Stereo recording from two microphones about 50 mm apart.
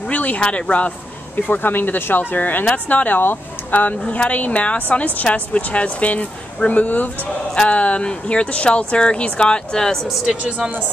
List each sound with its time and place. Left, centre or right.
0.1 s a sound: left
0.4 s speech: left
10.0 s speech: centre